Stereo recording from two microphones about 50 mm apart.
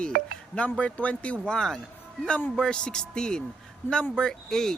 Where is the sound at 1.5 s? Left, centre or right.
Centre.